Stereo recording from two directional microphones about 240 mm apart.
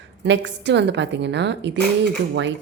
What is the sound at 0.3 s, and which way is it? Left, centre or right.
A woman's voice, right.